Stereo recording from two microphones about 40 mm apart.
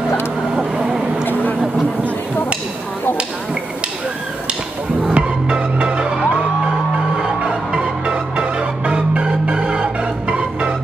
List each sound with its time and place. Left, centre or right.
0.6 s vehicle: right
5.1 s music: right